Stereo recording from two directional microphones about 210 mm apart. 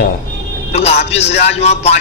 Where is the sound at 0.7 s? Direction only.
30° left (ahead or behind).